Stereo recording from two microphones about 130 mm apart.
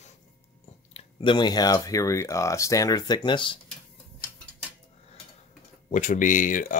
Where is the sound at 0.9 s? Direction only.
40° left (ahead or behind).